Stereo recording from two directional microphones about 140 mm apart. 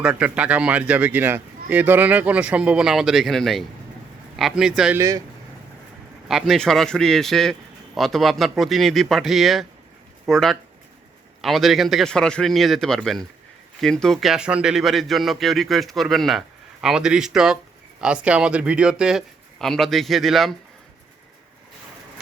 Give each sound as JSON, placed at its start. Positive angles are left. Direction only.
{"t": 0.0, "sound": "a man's voice", "side_deg": -10}
{"t": 4.9, "sound": "speech", "side_deg": -20}
{"t": 6.2, "sound": "a man's voice", "side_deg": 0}